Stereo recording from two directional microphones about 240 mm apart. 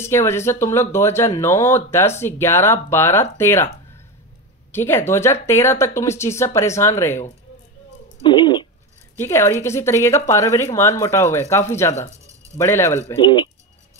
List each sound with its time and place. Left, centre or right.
0.0 s a woman's voice: centre
4.7 s a woman's voice: centre
8.2 s a sound: centre
9.1 s a woman's voice: centre